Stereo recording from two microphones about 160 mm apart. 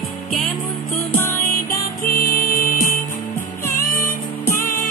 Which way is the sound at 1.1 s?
15° left (ahead or behind).